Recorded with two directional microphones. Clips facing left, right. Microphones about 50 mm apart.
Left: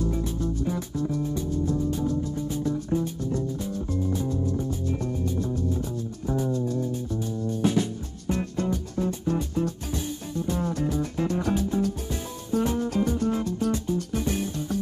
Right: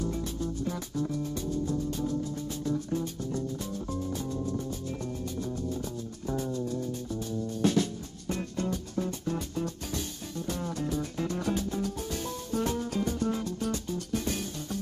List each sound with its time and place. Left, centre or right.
0.1 s music: centre
2.6 s music: centre
6.2 s music: centre
8.3 s music: centre